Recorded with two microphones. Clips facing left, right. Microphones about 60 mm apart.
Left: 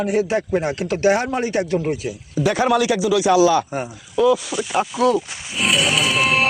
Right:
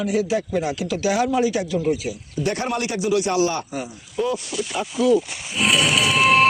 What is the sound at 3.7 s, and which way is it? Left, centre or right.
Speech, left.